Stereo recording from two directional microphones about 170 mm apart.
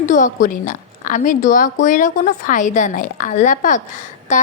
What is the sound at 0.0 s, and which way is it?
A woman's voice, 50° left (ahead or behind).